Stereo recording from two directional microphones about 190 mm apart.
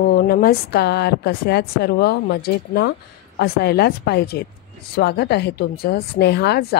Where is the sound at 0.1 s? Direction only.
55° left (ahead or behind).